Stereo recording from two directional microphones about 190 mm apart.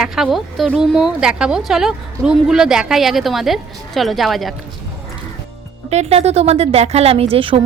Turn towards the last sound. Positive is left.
turn(degrees=-30)  # may be behind; listen again after turning